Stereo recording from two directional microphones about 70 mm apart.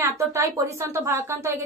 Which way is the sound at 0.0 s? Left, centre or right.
Right.